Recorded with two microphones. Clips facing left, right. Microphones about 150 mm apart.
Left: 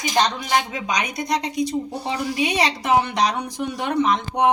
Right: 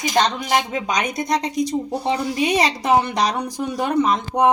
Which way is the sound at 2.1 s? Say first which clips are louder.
Right 3 dB; 45° right (ahead or behind).